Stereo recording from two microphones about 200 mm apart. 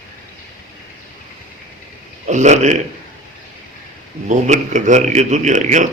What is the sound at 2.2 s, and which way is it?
Speech, 35° right (ahead or behind).